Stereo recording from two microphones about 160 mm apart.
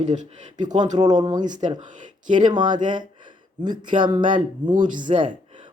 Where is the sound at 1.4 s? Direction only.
50° right (ahead or behind).